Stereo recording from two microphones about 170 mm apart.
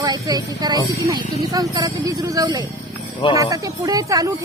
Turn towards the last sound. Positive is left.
turn(degrees=-20)  # may be behind; listen again after turning